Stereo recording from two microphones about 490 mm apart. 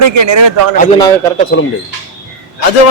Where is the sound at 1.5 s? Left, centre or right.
Left.